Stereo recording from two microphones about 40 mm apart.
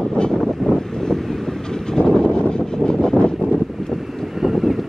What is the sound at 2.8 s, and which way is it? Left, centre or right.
Vehicle, centre.